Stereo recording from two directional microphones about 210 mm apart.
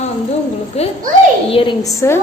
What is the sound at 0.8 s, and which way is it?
A woman's voice, 30° left (ahead or behind).